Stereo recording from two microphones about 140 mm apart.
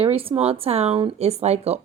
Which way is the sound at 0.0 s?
45° right (ahead or behind).